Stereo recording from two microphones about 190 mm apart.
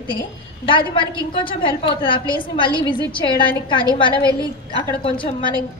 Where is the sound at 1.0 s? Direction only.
25° left (ahead or behind).